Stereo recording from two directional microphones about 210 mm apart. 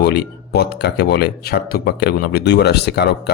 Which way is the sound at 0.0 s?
50° left (ahead or behind).